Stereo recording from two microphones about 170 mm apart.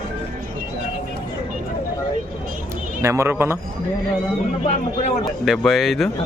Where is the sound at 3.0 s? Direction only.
15° right (ahead or behind).